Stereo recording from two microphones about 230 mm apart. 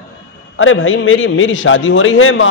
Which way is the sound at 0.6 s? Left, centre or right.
Left.